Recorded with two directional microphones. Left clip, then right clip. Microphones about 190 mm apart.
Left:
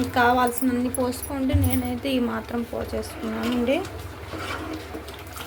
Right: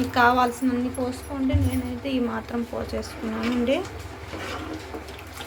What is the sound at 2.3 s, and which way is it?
Speech, centre (ahead or behind).